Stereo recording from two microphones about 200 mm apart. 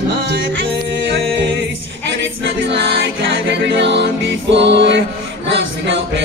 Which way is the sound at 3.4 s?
60° right (ahead or behind).